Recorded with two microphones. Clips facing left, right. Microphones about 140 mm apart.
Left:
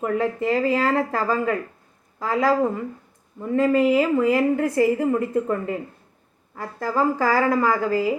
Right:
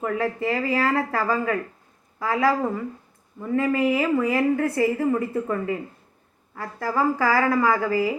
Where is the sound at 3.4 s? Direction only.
15° left (ahead or behind).